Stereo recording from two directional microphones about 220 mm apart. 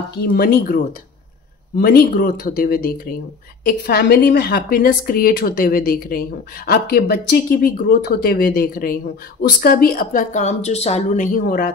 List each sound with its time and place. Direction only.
0.2 s a woman's voice: 45° left (ahead or behind)
1.8 s a woman's voice: 45° left (ahead or behind)